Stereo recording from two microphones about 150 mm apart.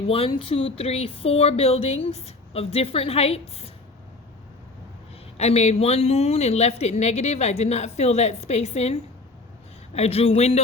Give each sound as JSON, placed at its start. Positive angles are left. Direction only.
{"t": 0.1, "sound": "speech", "side_deg": 40}
{"t": 5.4, "sound": "a woman's voice", "side_deg": 45}